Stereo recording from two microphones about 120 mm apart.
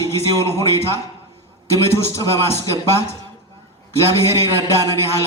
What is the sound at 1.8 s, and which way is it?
Speech, 20° left (ahead or behind).